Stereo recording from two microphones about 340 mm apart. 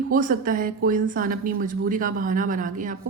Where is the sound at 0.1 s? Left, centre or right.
Right.